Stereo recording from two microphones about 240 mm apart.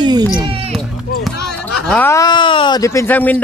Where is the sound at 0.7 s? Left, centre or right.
Centre.